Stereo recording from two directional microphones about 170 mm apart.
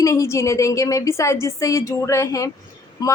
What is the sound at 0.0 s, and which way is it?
A woman's voice, 15° left (ahead or behind).